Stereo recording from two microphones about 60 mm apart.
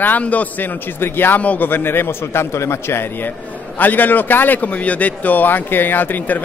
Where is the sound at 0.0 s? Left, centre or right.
Left.